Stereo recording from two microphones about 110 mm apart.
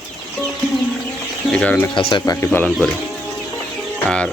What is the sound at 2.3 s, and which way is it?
Speech, 25° left (ahead or behind).